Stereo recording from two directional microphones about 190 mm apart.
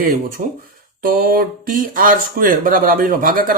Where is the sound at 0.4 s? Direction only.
45° right (ahead or behind).